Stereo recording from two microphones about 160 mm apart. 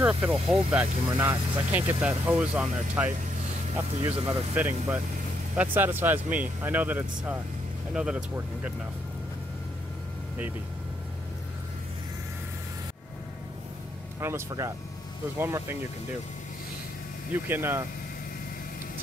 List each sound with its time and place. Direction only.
0.0 s speech: 5° right (ahead or behind)
14.2 s speech: 20° right (ahead or behind)
17.5 s speech: 15° right (ahead or behind)